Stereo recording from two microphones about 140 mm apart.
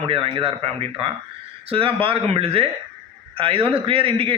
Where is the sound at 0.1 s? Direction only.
40° right (ahead or behind).